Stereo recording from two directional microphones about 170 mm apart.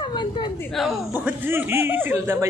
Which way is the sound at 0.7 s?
5° right (ahead or behind).